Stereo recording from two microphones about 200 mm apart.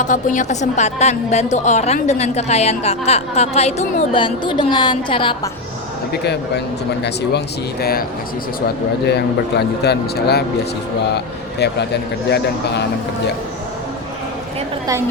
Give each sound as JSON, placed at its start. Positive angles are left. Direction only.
{"t": 0.0, "sound": "a woman's voice", "side_deg": 40}
{"t": 7.0, "sound": "a man's voice", "side_deg": 55}